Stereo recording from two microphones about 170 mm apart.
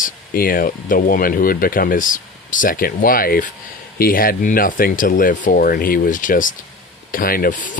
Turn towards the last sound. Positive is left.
turn(degrees=60)  # may be behind; listen again after turning